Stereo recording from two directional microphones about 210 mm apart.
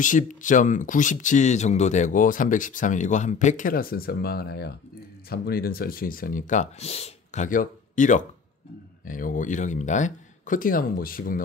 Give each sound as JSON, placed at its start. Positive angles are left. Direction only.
{"t": 0.0, "sound": "speech", "side_deg": 40}